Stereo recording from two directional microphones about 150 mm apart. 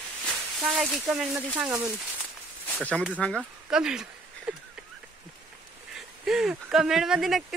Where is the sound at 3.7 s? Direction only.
5° right (ahead or behind).